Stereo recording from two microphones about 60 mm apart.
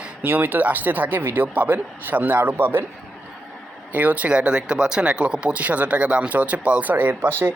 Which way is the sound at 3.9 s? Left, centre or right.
Right.